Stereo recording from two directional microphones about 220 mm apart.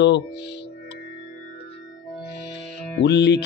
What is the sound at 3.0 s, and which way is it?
Speech, 50° left (ahead or behind).